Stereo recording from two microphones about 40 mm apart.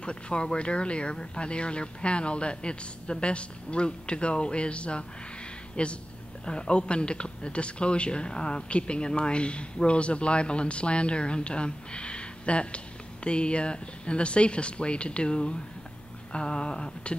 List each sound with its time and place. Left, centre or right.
0.0 s speech: left